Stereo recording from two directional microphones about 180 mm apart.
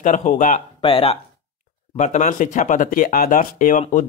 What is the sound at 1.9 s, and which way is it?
Speech, 40° left (ahead or behind).